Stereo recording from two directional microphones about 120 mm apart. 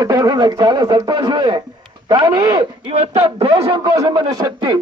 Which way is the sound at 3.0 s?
55° right (ahead or behind).